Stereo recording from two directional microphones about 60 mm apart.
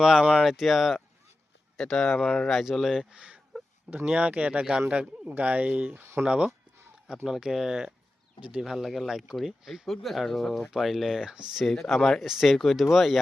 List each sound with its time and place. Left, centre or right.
0.0 s speech: centre; by 4.6 s right
4.6 s speech: centre
5.2 s speech: right
6.0 s speech: right
6.2 s speech: centre
8.4 s speech: right
8.6 s speech: centre
11.6 s speech: centre
12.2 s speech: centre